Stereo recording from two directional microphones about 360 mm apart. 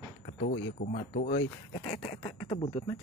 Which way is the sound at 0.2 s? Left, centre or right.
Left.